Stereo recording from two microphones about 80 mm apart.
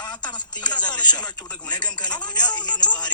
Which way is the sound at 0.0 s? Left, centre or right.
Left.